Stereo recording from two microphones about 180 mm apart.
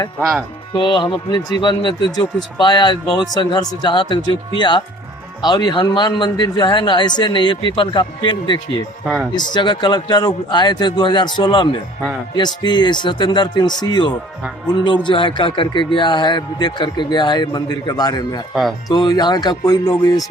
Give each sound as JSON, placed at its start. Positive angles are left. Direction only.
{"t": 0.2, "sound": "speech", "side_deg": -5}
{"t": 0.7, "sound": "speech", "side_deg": 25}
{"t": 5.4, "sound": "speech", "side_deg": 25}